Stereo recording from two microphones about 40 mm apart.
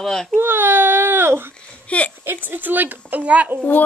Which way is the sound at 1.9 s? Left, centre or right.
Left.